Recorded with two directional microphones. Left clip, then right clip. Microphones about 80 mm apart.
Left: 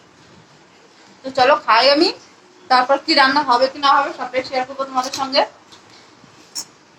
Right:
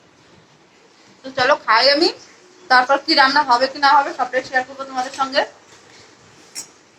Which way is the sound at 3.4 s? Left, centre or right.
Left.